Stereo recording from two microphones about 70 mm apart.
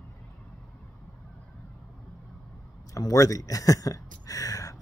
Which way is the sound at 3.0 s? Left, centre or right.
Left.